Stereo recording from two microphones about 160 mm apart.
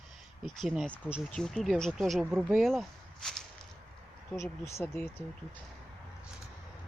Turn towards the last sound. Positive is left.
turn(degrees=15)  # may be behind; listen again after turning